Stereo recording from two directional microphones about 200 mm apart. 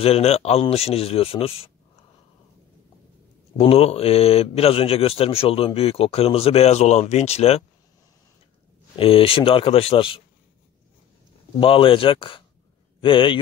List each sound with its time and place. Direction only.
0.0 s speech: 30° left (ahead or behind)
3.5 s speech: 30° left (ahead or behind)
8.9 s speech: 25° left (ahead or behind)
11.6 s speech: 25° left (ahead or behind)